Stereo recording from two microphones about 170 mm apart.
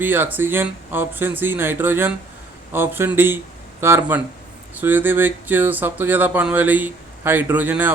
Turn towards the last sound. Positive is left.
turn(degrees=-10)  # may be behind; listen again after turning